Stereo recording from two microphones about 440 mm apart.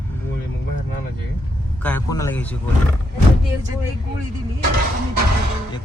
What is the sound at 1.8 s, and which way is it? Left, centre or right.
Speech, centre.